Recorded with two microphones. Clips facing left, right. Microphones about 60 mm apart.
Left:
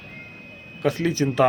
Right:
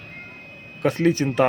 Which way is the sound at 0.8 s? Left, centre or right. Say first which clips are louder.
Right 2 dB; right.